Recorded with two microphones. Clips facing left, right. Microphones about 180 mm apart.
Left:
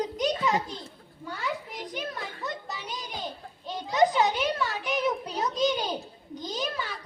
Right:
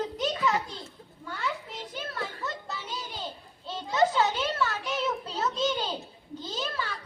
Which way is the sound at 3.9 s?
15° left (ahead or behind).